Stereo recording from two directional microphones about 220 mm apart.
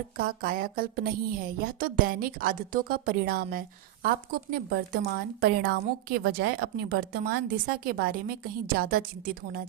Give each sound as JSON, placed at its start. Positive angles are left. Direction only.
{"t": 0.2, "sound": "a woman's voice", "side_deg": -40}